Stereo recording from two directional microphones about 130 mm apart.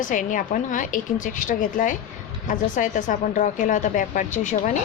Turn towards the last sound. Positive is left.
turn(degrees=70)  # may be behind; listen again after turning